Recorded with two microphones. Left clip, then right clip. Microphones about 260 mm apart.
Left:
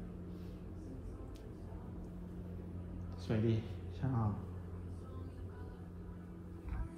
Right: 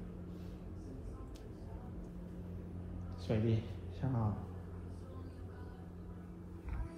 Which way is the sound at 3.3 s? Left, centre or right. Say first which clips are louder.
Even; left.